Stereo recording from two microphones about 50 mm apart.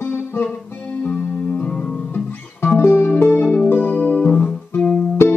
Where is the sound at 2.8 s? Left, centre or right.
Left.